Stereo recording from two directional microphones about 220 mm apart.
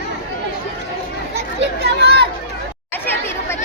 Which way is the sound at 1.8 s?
45° right (ahead or behind).